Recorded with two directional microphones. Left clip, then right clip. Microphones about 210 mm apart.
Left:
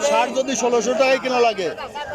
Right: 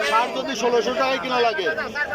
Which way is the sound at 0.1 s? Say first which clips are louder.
Left 2 dB; 15° left (ahead or behind).